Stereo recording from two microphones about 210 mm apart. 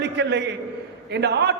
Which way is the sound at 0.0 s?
55° right (ahead or behind).